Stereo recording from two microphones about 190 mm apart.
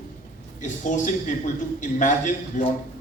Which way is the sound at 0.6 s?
40° left (ahead or behind).